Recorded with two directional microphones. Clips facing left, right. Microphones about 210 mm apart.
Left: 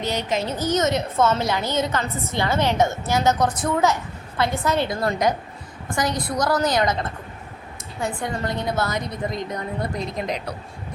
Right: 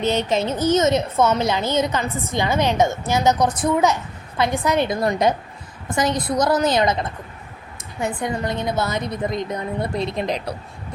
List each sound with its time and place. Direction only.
0.1 s a woman's voice: 25° right (ahead or behind)
8.0 s a woman's voice: 20° right (ahead or behind)
10.2 s speech: 30° right (ahead or behind)